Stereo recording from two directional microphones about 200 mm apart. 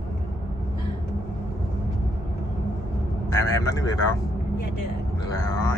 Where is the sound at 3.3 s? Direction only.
15° left (ahead or behind).